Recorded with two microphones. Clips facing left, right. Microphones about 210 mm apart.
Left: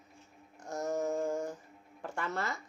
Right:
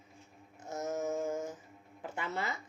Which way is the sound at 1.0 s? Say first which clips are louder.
Left 1 dB; centre (ahead or behind).